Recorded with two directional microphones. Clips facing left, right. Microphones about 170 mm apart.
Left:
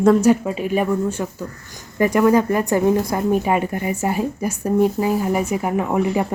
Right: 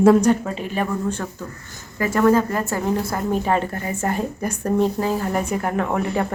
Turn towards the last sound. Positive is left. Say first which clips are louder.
# left 3 dB
turn(degrees=10)  # may be behind; listen again after turning